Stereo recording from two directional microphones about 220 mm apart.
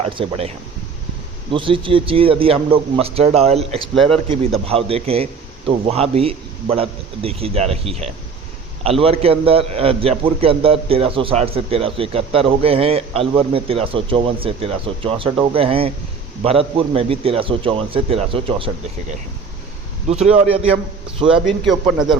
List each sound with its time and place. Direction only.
0.0 s a man's voice: 25° right (ahead or behind)
1.5 s a man's voice: 25° right (ahead or behind)
3.9 s a man's voice: centre (ahead or behind)
4.6 s a man's voice: 25° right (ahead or behind)
20.3 s a man's voice: 25° right (ahead or behind)
21.2 s a man's voice: centre (ahead or behind)